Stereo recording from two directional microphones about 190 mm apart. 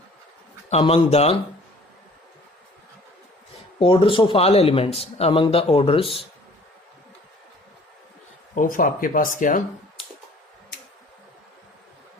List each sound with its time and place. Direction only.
0.7 s a man's voice: 30° left (ahead or behind)
3.8 s a man's voice: 25° left (ahead or behind)
8.5 s speech: 45° left (ahead or behind)